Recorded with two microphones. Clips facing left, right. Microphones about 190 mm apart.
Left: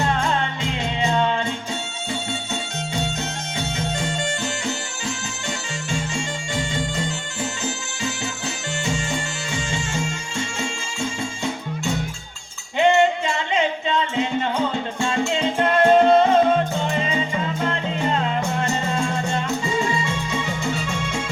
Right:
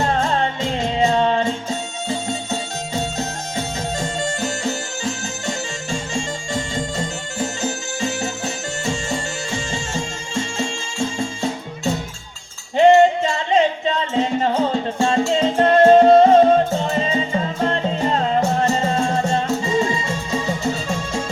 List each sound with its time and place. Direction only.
0.0 s music: 40° right (ahead or behind)
3.0 s music: 40° right (ahead or behind)
6.1 s bagpipes: 40° right (ahead or behind)
7.4 s music: 40° right (ahead or behind)
12.7 s music: 40° right (ahead or behind)